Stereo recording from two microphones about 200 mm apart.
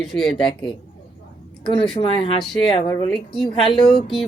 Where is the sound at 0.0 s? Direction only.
Centre (ahead or behind).